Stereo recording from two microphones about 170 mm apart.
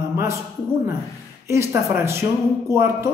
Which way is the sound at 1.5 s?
15° right (ahead or behind).